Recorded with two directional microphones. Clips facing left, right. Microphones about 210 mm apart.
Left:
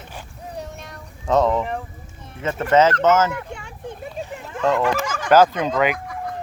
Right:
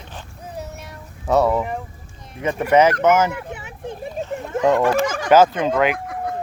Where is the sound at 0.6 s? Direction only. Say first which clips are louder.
Right 1 dB; 10° right (ahead or behind).